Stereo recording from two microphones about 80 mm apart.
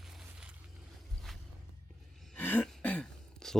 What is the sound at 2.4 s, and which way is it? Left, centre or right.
Throat clearing, left.